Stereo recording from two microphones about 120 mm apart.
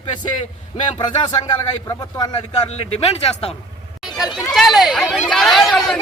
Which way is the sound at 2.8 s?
55° left (ahead or behind).